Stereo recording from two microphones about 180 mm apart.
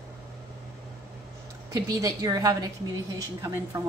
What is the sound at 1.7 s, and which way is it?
A woman's voice, 20° right (ahead or behind).